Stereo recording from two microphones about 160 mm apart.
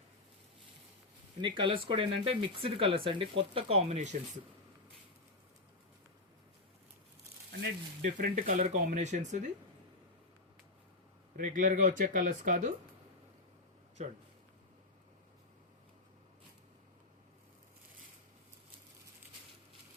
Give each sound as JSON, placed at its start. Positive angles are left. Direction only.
{"t": 1.4, "sound": "speech", "side_deg": -30}
{"t": 8.0, "sound": "speech", "side_deg": -55}
{"t": 11.3, "sound": "speech", "side_deg": -60}
{"t": 14.0, "sound": "speech", "side_deg": -45}